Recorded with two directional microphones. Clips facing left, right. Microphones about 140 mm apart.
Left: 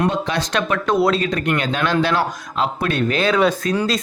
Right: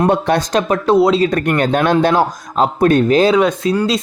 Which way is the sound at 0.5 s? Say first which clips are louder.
Right 3 dB; 35° right (ahead or behind).